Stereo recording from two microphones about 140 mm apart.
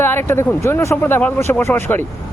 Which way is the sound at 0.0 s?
15° left (ahead or behind).